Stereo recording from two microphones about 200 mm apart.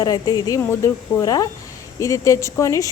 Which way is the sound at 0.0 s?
20° left (ahead or behind).